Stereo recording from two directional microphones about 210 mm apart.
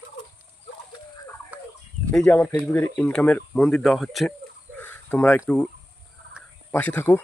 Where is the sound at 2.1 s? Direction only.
5° left (ahead or behind).